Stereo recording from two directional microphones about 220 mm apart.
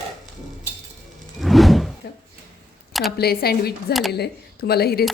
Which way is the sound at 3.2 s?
45° left (ahead or behind).